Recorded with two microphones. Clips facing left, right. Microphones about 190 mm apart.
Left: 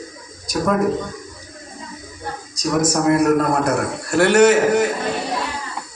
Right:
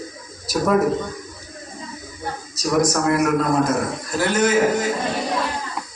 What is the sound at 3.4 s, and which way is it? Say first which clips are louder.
A man's voice: left 1 dB; 70° left (ahead or behind).